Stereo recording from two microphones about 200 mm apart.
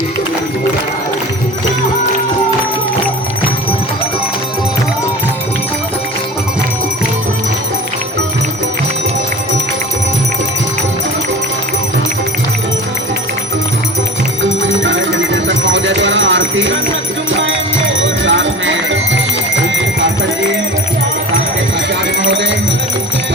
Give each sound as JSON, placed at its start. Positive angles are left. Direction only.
{"t": 14.8, "sound": "music", "side_deg": -65}
{"t": 22.3, "sound": "music", "side_deg": -60}